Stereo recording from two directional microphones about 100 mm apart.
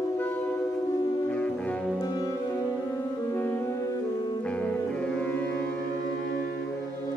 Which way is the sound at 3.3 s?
25° left (ahead or behind).